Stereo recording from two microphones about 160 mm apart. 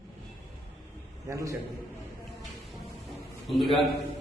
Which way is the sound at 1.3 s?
20° right (ahead or behind).